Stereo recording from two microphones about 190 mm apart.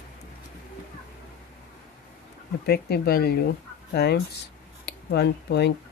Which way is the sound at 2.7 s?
55° left (ahead or behind).